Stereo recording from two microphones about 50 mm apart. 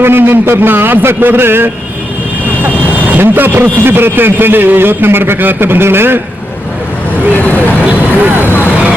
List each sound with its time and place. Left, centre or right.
0.0 s speech: right
2.6 s speech: right
7.3 s vehicle: left